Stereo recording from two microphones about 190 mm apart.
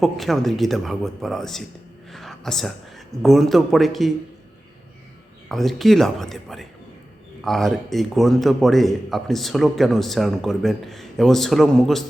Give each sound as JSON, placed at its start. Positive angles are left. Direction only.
{"t": 0.0, "sound": "a man's voice", "side_deg": 0}
{"t": 5.5, "sound": "a man's voice", "side_deg": 0}